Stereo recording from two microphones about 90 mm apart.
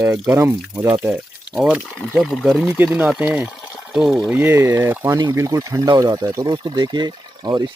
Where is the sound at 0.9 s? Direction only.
10° right (ahead or behind).